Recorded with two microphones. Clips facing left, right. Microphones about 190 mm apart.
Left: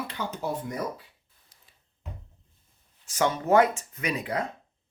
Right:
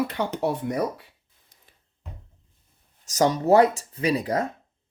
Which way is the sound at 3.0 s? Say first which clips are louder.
Right 5 dB; 40° right (ahead or behind).